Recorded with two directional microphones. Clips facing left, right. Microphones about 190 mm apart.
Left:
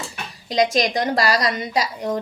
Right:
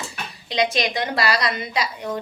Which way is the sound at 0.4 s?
45° left (ahead or behind).